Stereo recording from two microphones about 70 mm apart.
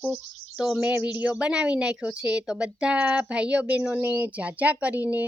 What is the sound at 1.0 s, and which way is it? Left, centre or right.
A woman's voice, centre.